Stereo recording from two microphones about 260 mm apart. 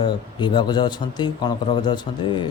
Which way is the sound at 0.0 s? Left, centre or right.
Centre.